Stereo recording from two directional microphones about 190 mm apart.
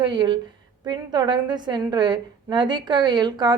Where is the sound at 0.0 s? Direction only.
25° right (ahead or behind).